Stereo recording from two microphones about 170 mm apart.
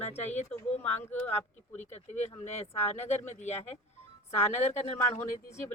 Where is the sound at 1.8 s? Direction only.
40° left (ahead or behind).